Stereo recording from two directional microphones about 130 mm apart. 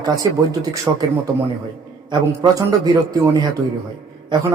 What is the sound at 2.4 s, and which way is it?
A man's voice, 30° right (ahead or behind).